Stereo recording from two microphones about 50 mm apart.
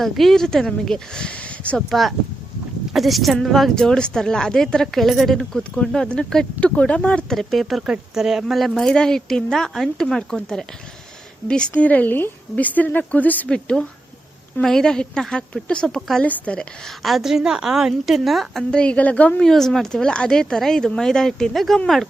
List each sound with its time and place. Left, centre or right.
0.0 s speech: centre; by 1.8 s left
1.9 s a woman's voice: centre
3.8 s speech: centre
6.1 s speech: left
7.3 s a woman's voice: centre
11.9 s speech: left
13.5 s speech: centre
15.9 s speech: centre
16.2 s speech: left
17.0 s a woman's voice: centre
18.7 s speech: left
19.4 s speech: centre